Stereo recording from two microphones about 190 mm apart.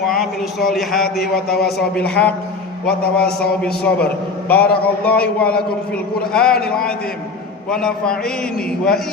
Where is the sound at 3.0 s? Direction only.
55° left (ahead or behind).